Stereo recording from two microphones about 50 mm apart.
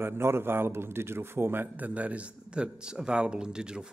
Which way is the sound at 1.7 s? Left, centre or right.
Right.